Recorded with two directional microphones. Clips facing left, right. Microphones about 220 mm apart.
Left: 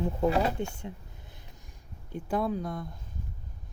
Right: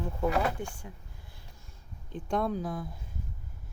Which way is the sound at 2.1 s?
5° left (ahead or behind).